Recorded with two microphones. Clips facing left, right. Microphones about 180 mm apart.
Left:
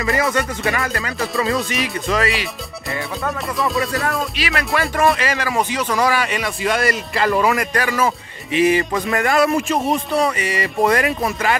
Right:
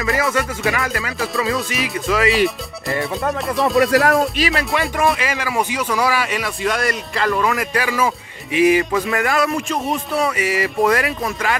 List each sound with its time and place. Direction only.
0.0 s a man's voice: centre (ahead or behind)
3.9 s speech: 75° right (ahead or behind)
4.4 s speech: 35° right (ahead or behind)
5.0 s a man's voice: 5° right (ahead or behind)